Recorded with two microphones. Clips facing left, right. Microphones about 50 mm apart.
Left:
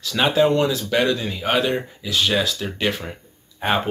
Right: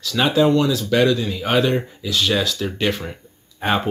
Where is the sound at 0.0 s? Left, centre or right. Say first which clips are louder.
Right 1 dB; centre.